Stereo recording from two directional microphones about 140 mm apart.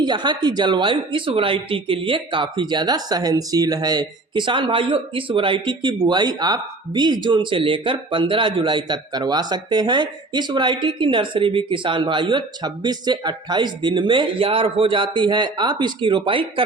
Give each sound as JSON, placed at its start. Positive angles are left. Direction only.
{"t": 0.0, "sound": "speech", "side_deg": -30}